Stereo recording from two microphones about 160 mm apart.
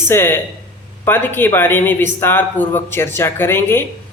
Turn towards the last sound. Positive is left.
turn(degrees=15)  # may be behind; listen again after turning